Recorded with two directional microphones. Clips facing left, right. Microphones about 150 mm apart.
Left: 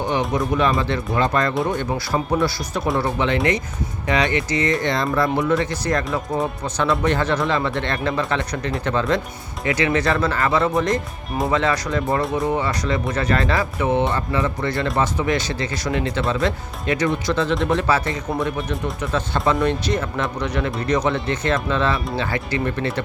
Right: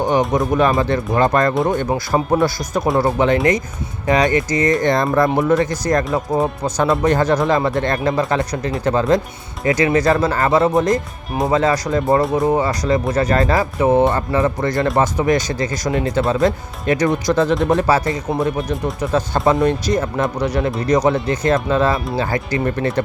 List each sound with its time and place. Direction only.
0.0 s speech: 45° right (ahead or behind)